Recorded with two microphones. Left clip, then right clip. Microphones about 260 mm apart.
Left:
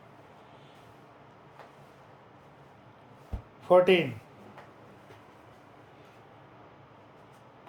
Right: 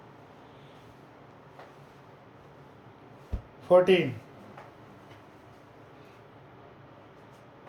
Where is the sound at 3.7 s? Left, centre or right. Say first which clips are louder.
Even; centre.